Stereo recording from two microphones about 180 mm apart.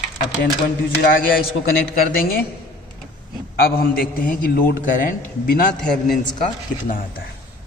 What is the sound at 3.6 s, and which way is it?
A man's voice, 55° left (ahead or behind).